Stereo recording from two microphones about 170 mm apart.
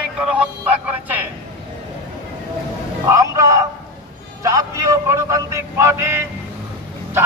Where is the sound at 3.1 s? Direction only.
20° right (ahead or behind).